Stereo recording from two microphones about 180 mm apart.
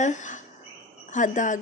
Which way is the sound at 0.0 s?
45° left (ahead or behind).